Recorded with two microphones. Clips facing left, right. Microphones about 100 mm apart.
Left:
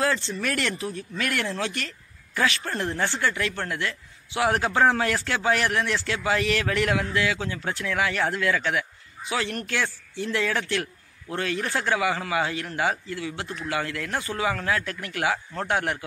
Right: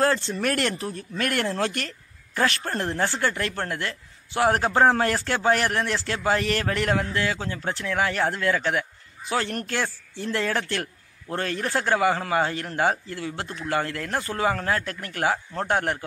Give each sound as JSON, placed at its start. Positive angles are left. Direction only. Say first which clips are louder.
{"t": 0.3, "sound": "a man's voice", "louder": "right 3 dB", "side_deg": -45}